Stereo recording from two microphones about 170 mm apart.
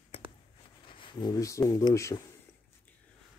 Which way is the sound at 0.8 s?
30° left (ahead or behind).